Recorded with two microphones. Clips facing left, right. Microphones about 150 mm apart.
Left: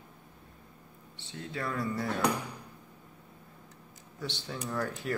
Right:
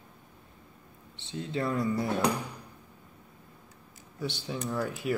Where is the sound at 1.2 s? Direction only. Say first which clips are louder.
Right 6 dB; 25° right (ahead or behind).